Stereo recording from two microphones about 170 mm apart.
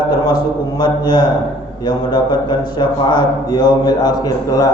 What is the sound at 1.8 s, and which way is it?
A man's voice, 25° left (ahead or behind).